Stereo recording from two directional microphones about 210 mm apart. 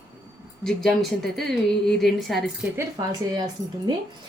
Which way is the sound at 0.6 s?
Centre (ahead or behind).